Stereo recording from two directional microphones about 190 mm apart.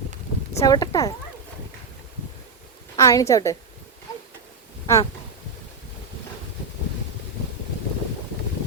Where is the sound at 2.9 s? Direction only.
15° left (ahead or behind).